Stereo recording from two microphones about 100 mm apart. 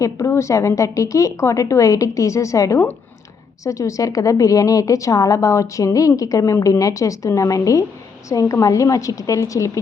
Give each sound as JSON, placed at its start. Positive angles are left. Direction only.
{"t": 0.0, "sound": "a woman's voice", "side_deg": 30}